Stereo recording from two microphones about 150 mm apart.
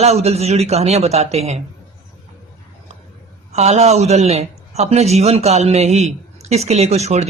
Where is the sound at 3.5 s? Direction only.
45° right (ahead or behind).